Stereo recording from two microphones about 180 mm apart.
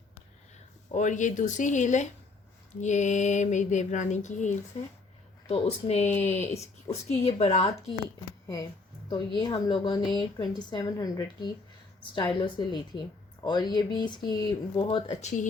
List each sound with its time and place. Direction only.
0.9 s speech: 45° left (ahead or behind)
9.0 s speech: 25° left (ahead or behind); by 15.4 s 40° left (ahead or behind)